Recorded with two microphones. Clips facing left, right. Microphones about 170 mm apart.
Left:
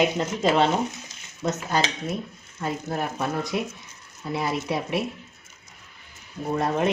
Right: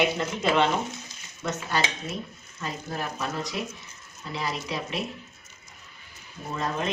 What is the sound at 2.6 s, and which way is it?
Speech, 55° left (ahead or behind).